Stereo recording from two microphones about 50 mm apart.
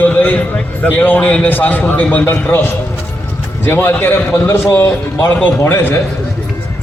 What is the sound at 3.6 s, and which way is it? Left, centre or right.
Speech, left.